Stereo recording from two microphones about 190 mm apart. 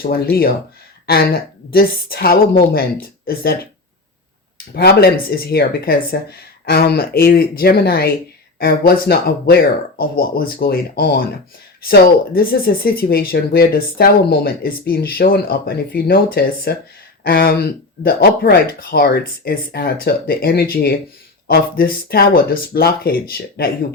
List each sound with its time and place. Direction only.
0.0 s speech: 50° left (ahead or behind)